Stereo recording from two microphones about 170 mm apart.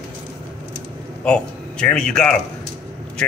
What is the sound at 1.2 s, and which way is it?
A man's voice, 5° left (ahead or behind).